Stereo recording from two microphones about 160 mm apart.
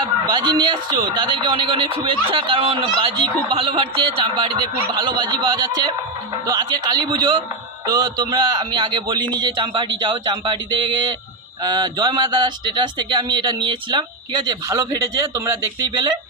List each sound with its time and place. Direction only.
0.0 s speech: 30° right (ahead or behind)
11.6 s speech: 25° right (ahead or behind)